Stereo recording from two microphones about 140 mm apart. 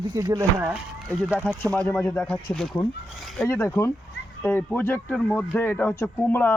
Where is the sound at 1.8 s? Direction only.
15° left (ahead or behind).